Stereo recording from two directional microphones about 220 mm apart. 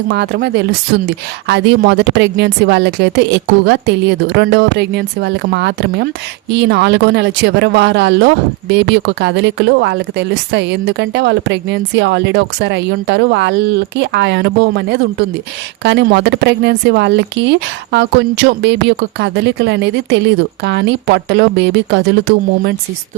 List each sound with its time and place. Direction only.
0.1 s speech: 50° right (ahead or behind)